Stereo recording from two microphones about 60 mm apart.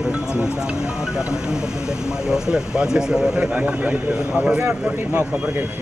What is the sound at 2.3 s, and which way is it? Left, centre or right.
Speech, centre.